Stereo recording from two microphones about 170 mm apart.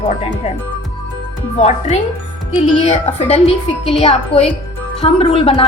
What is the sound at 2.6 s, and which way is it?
A woman's voice, 40° left (ahead or behind).